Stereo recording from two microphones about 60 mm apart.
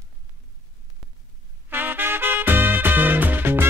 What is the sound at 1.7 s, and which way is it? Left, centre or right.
Music, right.